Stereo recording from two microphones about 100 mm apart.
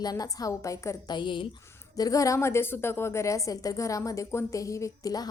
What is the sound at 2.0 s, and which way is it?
A woman's voice, 35° left (ahead or behind).